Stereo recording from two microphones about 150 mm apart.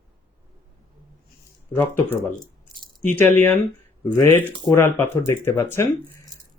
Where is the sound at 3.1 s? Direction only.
10° left (ahead or behind).